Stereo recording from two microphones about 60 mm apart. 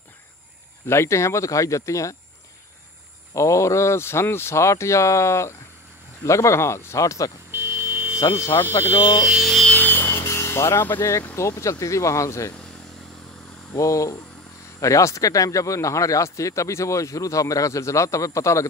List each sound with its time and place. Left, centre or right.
0.8 s speech: left
3.3 s speech: left
7.5 s buzzer: right
8.2 s speech: left
9.4 s a sound: centre
9.8 s a sound: left
10.0 s a sound: left
11.0 s speech: left
13.7 s speech: left